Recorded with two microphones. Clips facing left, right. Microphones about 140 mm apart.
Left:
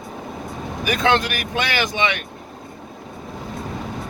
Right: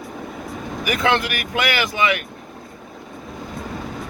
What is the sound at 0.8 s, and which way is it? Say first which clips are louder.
Speech: left 1 dB; 25° left (ahead or behind).